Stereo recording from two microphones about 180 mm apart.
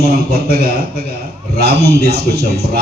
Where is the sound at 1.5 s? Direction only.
60° right (ahead or behind).